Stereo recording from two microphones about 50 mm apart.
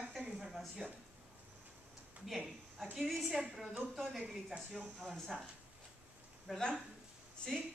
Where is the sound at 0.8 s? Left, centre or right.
Right.